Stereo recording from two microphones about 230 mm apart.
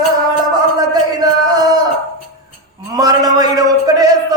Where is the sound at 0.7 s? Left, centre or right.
Centre.